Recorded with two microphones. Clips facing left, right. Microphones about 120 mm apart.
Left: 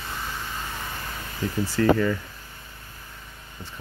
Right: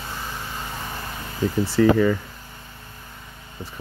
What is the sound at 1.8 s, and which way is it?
Speech, 15° right (ahead or behind).